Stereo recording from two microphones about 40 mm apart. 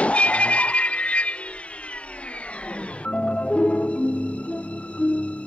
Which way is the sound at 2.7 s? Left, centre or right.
Left.